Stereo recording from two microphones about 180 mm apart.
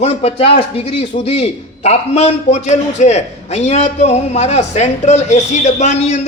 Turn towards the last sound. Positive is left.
turn(degrees=40)  # may be behind; listen again after turning